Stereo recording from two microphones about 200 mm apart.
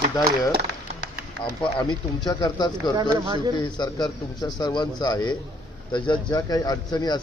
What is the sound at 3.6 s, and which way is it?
A man's voice, 20° left (ahead or behind).